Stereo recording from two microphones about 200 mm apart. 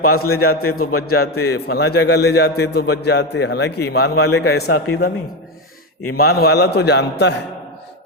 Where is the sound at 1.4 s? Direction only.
55° left (ahead or behind).